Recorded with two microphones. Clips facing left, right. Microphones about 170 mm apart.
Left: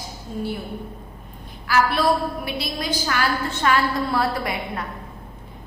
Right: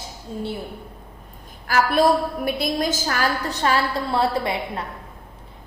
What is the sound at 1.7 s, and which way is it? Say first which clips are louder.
A woman's voice: right 2 dB; 45° right (ahead or behind).